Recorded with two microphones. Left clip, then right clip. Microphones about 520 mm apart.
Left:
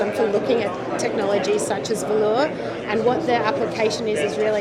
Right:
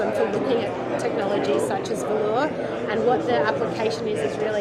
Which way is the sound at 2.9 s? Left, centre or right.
Left.